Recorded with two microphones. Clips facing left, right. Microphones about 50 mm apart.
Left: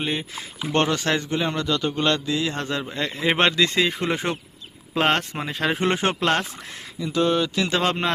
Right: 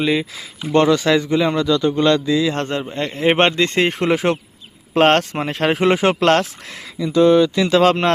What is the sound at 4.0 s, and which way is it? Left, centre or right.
Speech, right.